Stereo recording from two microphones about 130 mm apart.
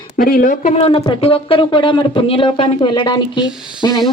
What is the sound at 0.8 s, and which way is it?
A woman's voice, 50° left (ahead or behind).